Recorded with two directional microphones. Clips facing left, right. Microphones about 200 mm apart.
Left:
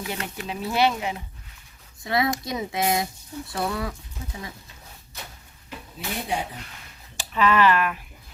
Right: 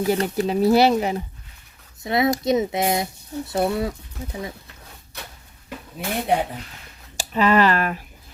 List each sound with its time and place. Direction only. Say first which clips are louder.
0.0 s speech: right 11 dB; 35° right (ahead or behind)
2.0 s speech: right 5 dB; 25° right (ahead or behind)
5.1 s a sound: right 2 dB; 65° right (ahead or behind)
7.2 s speech: right 3 dB; 40° right (ahead or behind)